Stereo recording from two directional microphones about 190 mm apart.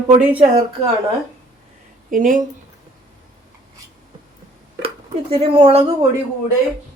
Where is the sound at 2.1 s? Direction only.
45° right (ahead or behind).